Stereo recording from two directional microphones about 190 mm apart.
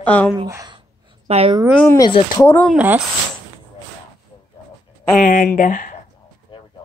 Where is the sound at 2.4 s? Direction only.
10° left (ahead or behind).